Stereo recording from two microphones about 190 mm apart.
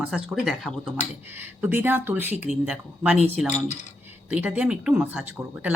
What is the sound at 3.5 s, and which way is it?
Speech, 35° left (ahead or behind).